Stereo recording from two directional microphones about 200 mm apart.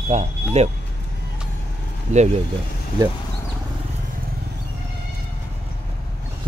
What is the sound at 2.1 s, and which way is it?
Speech, 35° right (ahead or behind).